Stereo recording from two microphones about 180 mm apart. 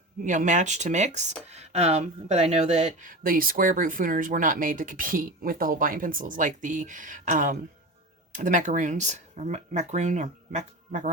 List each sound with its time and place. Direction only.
0.3 s speech: 45° right (ahead or behind)